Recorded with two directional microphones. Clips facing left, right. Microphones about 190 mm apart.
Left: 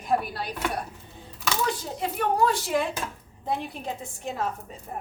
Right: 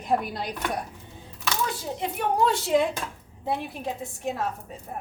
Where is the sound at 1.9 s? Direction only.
20° right (ahead or behind).